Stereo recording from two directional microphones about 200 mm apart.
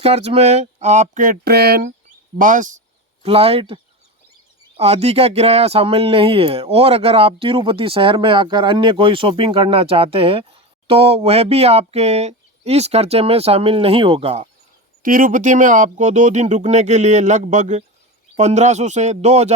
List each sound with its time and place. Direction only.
0.0 s speech: 30° right (ahead or behind); by 1.9 s 50° right (ahead or behind)
2.4 s speech: 40° right (ahead or behind)
3.2 s speech: 30° right (ahead or behind)
4.8 s speech: 30° right (ahead or behind)
15.0 s speech: 45° right (ahead or behind)